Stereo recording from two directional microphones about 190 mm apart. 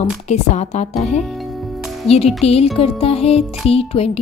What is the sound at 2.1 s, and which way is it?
Speech, 30° left (ahead or behind).